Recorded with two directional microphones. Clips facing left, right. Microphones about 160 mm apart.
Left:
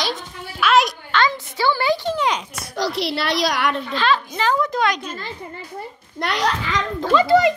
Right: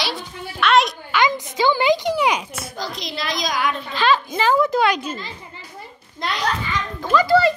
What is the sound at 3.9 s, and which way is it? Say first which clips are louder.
A child's voice: right 5 dB; 5° right (ahead or behind).